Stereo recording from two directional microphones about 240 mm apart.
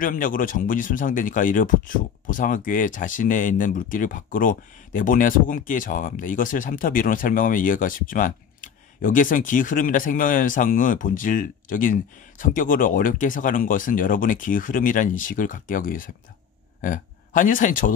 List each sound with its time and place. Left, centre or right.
0.0 s speech: left